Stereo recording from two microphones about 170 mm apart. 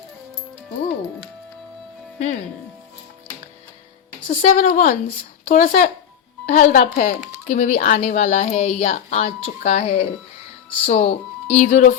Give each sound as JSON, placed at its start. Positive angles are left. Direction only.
{"t": 4.3, "sound": "speech", "side_deg": 45}